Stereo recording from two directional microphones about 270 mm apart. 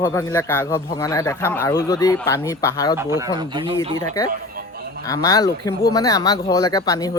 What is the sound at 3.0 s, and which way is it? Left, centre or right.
Speech, centre.